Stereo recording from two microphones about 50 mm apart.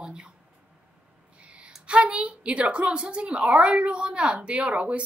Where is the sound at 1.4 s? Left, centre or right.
Right.